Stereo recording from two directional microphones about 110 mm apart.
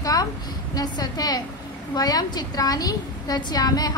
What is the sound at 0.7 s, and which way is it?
A woman's voice, 35° left (ahead or behind).